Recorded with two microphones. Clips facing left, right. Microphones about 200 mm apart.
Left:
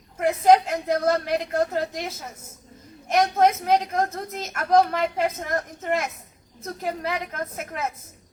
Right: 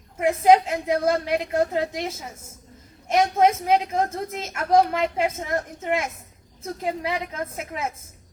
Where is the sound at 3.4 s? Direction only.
25° right (ahead or behind).